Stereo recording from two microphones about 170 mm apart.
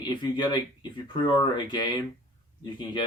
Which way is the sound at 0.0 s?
25° left (ahead or behind).